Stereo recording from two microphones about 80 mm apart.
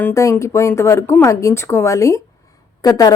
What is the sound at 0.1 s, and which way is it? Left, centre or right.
A woman's voice, left.